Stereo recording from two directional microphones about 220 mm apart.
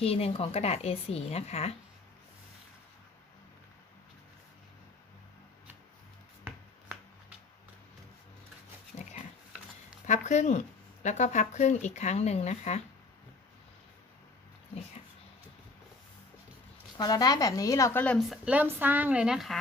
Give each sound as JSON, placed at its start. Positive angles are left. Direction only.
{"t": 0.0, "sound": "a woman's voice", "side_deg": 25}
{"t": 8.9, "sound": "pig", "side_deg": 30}
{"t": 10.1, "sound": "speech", "side_deg": 35}
{"t": 17.0, "sound": "speech", "side_deg": 15}